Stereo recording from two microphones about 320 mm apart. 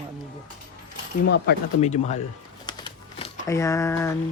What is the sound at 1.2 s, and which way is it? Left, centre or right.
Speech, left.